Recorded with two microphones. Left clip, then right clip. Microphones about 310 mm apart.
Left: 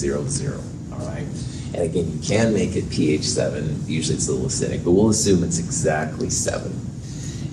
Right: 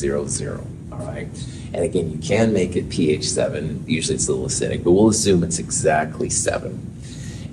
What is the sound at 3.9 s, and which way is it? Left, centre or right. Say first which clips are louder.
Speech: right 3 dB; right.